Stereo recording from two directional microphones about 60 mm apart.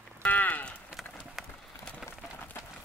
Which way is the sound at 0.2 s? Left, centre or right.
Left.